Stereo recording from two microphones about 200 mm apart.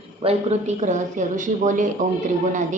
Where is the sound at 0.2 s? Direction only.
30° right (ahead or behind).